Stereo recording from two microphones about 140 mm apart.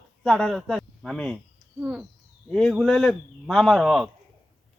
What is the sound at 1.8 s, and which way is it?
Owl, 5° right (ahead or behind).